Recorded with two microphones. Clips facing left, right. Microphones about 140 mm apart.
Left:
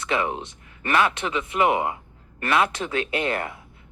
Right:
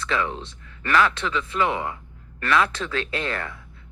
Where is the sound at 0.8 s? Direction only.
25° left (ahead or behind).